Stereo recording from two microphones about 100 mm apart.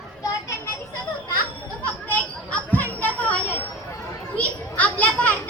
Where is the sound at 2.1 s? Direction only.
15° left (ahead or behind).